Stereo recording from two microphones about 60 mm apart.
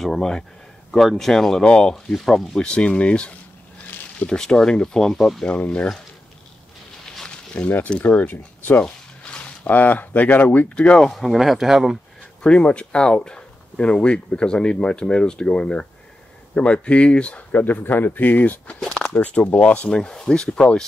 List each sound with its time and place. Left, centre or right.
0.0 s speech: centre
5.5 s speech: left
7.2 s a sound: centre
7.9 s speech: left
8.8 s a sound: centre
9.7 s speech: left
11.1 s speech: centre
12.4 s speech: centre
18.9 s a sound: centre
19.1 s speech: left
19.9 s speech: centre